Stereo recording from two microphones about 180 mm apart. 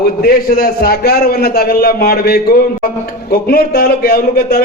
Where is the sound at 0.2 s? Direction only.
55° left (ahead or behind).